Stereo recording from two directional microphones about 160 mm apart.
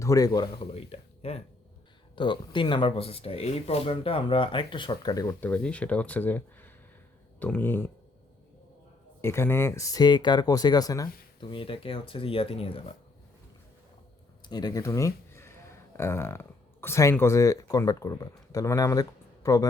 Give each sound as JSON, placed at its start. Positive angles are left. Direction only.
{"t": 0.0, "sound": "speech", "side_deg": 20}
{"t": 5.4, "sound": "speech", "side_deg": 10}
{"t": 9.2, "sound": "speech", "side_deg": 15}
{"t": 11.4, "sound": "speech", "side_deg": 35}
{"t": 14.4, "sound": "speech", "side_deg": 25}